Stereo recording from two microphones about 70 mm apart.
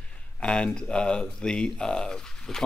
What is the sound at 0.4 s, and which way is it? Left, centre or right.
Speech, centre.